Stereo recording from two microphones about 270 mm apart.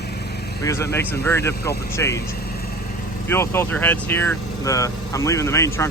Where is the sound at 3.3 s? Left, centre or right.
Centre.